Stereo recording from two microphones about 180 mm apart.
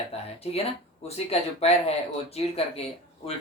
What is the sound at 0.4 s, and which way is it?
Speech, 30° left (ahead or behind).